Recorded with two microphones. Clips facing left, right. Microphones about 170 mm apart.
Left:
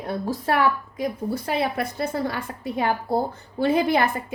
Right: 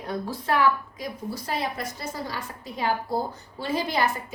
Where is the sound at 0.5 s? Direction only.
55° left (ahead or behind).